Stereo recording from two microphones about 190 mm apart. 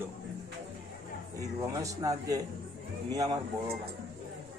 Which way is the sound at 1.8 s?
20° right (ahead or behind).